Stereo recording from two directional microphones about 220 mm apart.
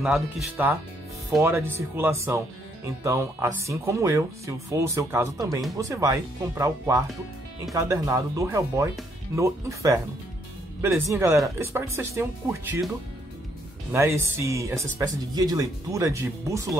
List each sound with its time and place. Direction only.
0.0 s speech: 5° right (ahead or behind)
13.9 s speech: 10° right (ahead or behind)